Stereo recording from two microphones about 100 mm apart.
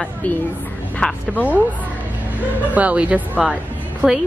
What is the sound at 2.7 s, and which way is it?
Speech, 15° right (ahead or behind).